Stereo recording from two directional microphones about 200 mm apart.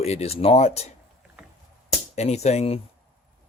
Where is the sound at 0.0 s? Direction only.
30° left (ahead or behind).